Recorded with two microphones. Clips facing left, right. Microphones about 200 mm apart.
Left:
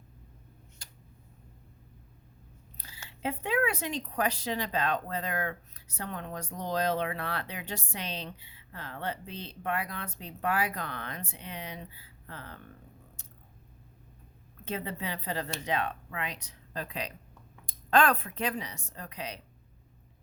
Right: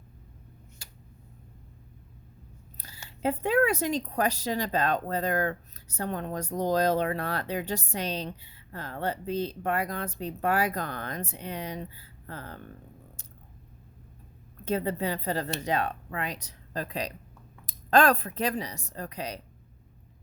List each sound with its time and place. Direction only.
2.7 s a sound: 45° right (ahead or behind)
3.1 s speech: 40° right (ahead or behind)
14.6 s speech: 40° right (ahead or behind)